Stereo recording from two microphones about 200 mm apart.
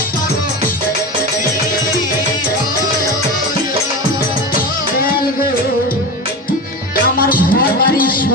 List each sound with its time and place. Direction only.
7.2 s music: 45° left (ahead or behind)